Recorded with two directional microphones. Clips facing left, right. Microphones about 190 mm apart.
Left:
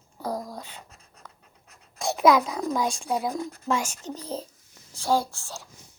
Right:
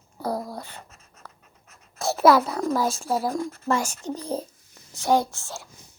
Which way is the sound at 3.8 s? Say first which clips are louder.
Right 4 dB; 10° right (ahead or behind).